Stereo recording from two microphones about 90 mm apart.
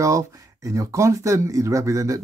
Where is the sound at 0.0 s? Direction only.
35° right (ahead or behind).